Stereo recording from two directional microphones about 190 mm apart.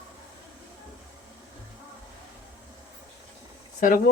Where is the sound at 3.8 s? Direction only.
45° left (ahead or behind).